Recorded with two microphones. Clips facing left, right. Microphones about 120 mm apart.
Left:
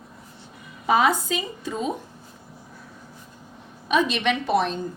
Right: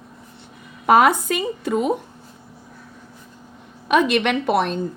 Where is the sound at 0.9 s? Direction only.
60° right (ahead or behind).